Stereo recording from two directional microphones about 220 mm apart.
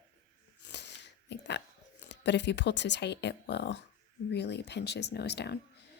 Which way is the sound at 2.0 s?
50° left (ahead or behind).